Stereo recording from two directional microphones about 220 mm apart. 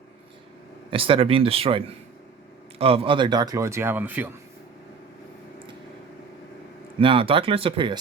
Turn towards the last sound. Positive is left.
turn(degrees=-25)  # may be behind; listen again after turning